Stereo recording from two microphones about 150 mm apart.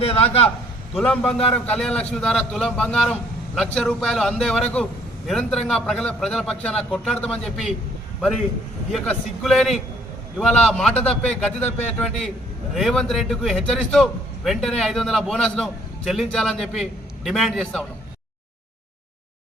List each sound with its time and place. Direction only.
0.0 s a man's voice: 40° left (ahead or behind)
0.9 s a man's voice: 5° left (ahead or behind)
8.9 s a man's voice: centre (ahead or behind)